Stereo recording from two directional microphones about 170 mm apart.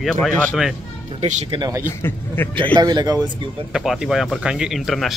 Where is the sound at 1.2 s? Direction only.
45° right (ahead or behind).